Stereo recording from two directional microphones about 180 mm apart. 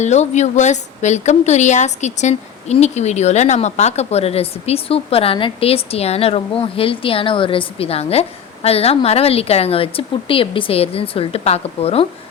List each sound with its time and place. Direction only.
0.0 s a woman's voice: 40° left (ahead or behind)